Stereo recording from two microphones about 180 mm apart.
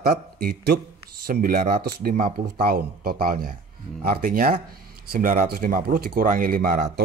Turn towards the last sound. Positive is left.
turn(degrees=-60)  # may be behind; listen again after turning